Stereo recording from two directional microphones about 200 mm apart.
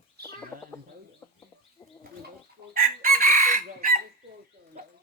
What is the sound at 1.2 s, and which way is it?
Chicken, 10° left (ahead or behind).